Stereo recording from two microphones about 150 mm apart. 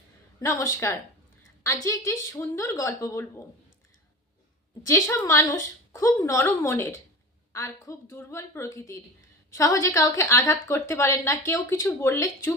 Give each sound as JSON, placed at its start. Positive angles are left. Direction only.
{"t": 0.3, "sound": "speech", "side_deg": 20}
{"t": 4.9, "sound": "speech", "side_deg": 20}